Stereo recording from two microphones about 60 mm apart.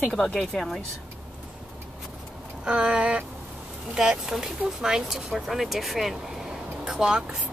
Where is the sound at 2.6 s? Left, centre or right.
Centre.